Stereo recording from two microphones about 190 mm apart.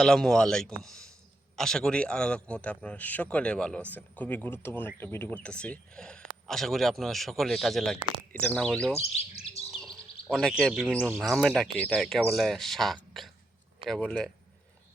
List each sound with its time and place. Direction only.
0.0 s speech: 5° left (ahead or behind)
9.1 s bird: 30° left (ahead or behind)
9.7 s bird: centre (ahead or behind)
10.2 s speech: centre (ahead or behind)